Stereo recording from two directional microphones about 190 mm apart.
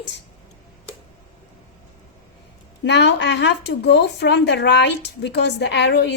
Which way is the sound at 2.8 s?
65° left (ahead or behind).